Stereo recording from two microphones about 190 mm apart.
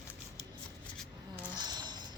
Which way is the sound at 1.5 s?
20° right (ahead or behind).